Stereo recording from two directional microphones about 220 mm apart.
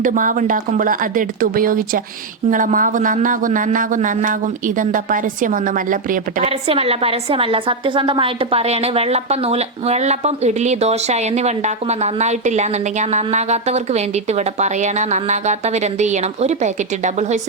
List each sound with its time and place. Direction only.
0.0 s a woman's voice: 35° right (ahead or behind)
6.5 s a woman's voice: 25° right (ahead or behind)